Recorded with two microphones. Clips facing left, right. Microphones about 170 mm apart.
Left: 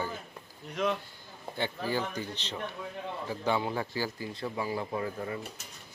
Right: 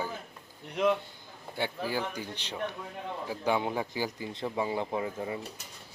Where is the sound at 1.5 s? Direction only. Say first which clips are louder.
Even; 10° right (ahead or behind).